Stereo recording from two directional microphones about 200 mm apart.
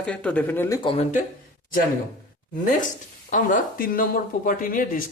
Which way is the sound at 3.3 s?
40° left (ahead or behind).